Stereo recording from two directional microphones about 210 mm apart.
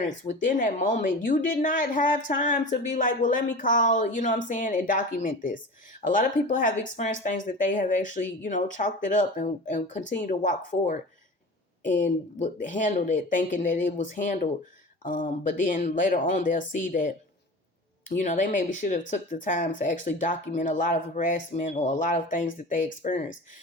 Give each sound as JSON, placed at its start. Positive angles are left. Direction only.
{"t": 0.3, "sound": "a woman's voice", "side_deg": 40}